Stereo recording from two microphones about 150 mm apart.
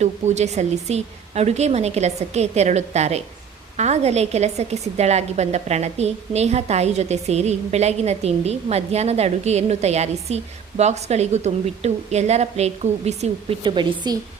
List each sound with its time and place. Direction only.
0.0 s a woman's voice: 50° right (ahead or behind)
13.7 s a woman's voice: 30° right (ahead or behind)